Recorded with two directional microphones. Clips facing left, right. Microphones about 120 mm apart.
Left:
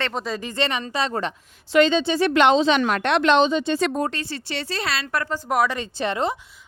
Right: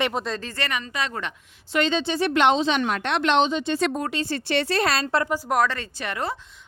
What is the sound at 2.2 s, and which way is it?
Speech, 90° left.